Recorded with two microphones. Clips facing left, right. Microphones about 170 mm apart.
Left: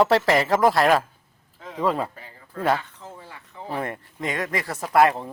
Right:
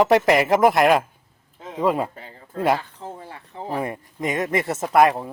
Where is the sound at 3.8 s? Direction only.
15° right (ahead or behind).